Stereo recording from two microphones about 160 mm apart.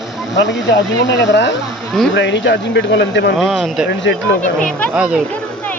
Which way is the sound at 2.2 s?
90° left.